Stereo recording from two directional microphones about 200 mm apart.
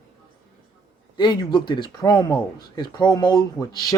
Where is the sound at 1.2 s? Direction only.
20° left (ahead or behind).